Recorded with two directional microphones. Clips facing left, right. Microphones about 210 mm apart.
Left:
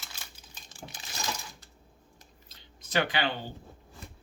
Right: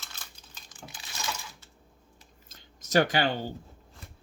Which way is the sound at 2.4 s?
45° right (ahead or behind).